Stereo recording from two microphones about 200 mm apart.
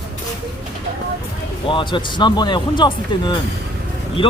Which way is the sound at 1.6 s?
25° left (ahead or behind).